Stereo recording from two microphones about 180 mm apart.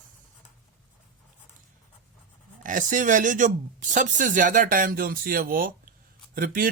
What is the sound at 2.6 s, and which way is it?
A man's voice, 45° right (ahead or behind).